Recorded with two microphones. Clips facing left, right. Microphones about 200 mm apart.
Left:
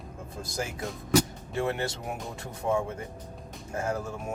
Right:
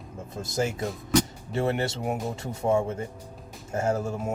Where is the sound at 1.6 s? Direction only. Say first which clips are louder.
Right 3 dB; 25° right (ahead or behind).